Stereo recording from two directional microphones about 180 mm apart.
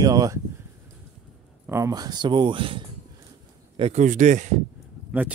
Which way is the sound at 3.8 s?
40° right (ahead or behind).